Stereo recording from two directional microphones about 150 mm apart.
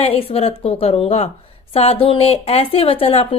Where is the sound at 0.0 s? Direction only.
40° left (ahead or behind).